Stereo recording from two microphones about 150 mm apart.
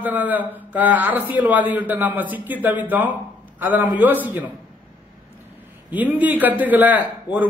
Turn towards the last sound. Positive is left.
turn(degrees=-10)  # may be behind; listen again after turning